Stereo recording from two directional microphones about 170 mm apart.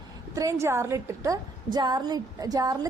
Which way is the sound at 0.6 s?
15° right (ahead or behind).